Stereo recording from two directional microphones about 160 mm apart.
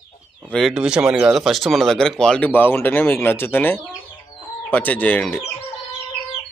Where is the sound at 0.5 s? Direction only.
Centre (ahead or behind).